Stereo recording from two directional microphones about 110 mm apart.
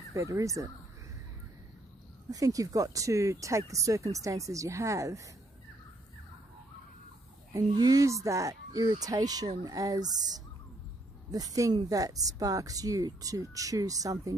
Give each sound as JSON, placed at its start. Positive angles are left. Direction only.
{"t": 0.1, "sound": "speech", "side_deg": -30}
{"t": 2.3, "sound": "speech", "side_deg": -30}
{"t": 7.5, "sound": "speech", "side_deg": -35}